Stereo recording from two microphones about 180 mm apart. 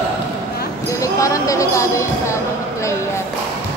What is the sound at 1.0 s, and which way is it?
Speech, 15° left (ahead or behind).